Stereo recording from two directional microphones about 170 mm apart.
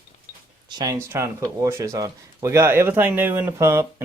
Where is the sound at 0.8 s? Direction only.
20° right (ahead or behind).